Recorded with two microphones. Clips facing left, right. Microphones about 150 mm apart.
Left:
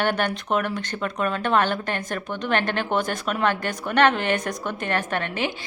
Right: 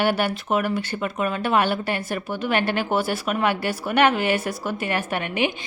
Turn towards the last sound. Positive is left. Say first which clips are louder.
# right 2 dB
turn(degrees=-10)  # may be behind; listen again after turning